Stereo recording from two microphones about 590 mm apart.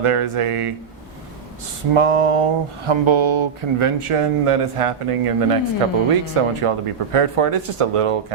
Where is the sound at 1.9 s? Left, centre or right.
Right.